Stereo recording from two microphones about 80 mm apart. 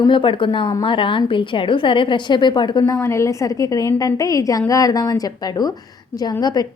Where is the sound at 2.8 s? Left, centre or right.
Left.